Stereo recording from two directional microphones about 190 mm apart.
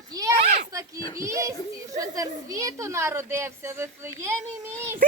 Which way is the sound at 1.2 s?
15° right (ahead or behind).